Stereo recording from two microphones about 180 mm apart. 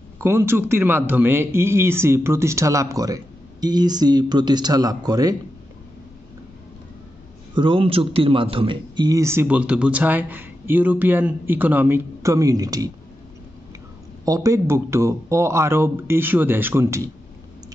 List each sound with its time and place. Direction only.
0.2 s speech: 15° right (ahead or behind)
7.5 s speech: 30° right (ahead or behind)
14.2 s speech: 15° right (ahead or behind)